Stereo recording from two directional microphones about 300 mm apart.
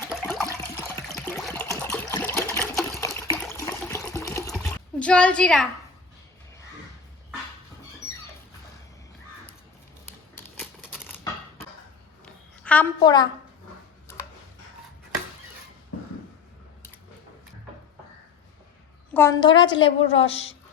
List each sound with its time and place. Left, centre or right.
0.0 s water: centre
10.3 s typewriter: centre
12.2 s a sound: centre
19.1 s a woman's voice: centre